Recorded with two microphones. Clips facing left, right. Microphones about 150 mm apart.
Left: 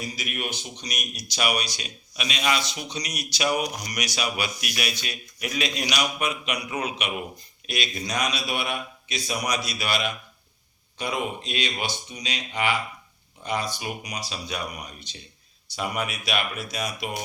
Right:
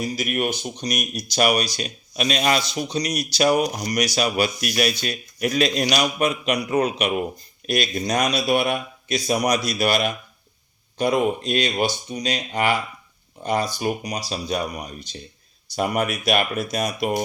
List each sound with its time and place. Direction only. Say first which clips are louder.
0.0 s a man's voice: right 9 dB; 45° right (ahead or behind)